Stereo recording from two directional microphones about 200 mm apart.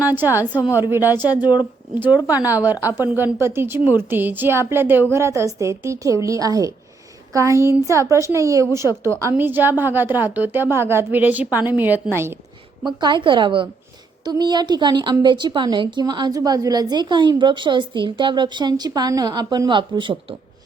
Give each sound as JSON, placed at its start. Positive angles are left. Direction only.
{"t": 0.0, "sound": "a woman's voice", "side_deg": -10}
{"t": 12.8, "sound": "a woman's voice", "side_deg": -20}